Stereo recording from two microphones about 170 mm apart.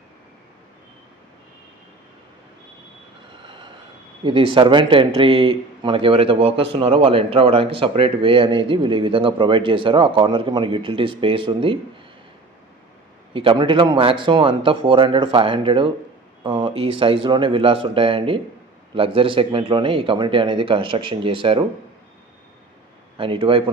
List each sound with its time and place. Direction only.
4.2 s speech: 30° right (ahead or behind)
13.3 s speech: 30° right (ahead or behind)
23.1 s speech: 30° right (ahead or behind)